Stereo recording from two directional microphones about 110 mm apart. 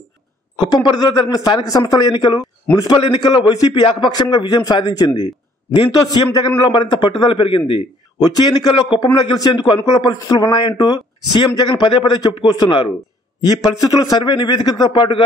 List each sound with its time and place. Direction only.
0.6 s a man's voice: 40° left (ahead or behind)